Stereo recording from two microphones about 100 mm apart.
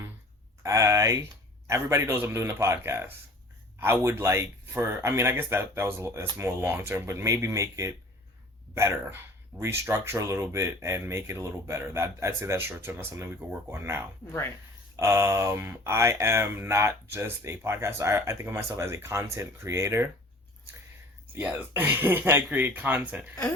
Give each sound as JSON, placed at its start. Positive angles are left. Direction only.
{"t": 0.6, "sound": "speech", "side_deg": -30}
{"t": 21.3, "sound": "speech", "side_deg": -20}